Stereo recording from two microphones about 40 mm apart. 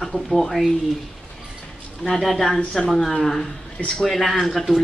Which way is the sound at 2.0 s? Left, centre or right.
Centre.